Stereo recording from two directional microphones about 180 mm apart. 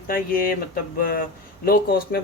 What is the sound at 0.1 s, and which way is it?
Speech, 50° left (ahead or behind).